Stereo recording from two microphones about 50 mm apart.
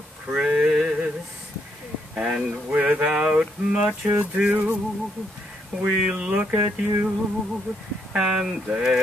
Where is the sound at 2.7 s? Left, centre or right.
Right.